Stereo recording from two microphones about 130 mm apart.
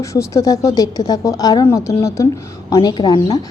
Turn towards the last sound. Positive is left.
turn(degrees=30)  # may be behind; listen again after turning